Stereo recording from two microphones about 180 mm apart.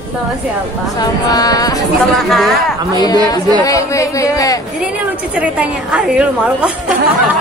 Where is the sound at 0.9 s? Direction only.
20° left (ahead or behind).